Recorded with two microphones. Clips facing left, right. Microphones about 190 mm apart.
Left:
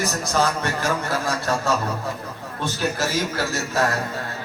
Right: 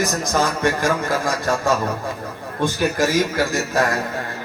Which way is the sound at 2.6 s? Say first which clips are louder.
Right 5 dB; 15° right (ahead or behind).